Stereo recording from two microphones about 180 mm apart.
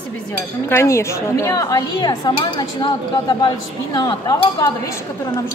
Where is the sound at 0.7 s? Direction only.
15° left (ahead or behind).